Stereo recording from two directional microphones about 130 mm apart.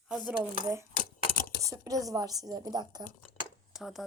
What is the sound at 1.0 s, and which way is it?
Typewriter, 90° left.